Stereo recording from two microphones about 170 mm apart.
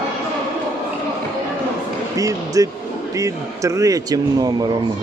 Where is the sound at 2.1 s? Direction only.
20° right (ahead or behind).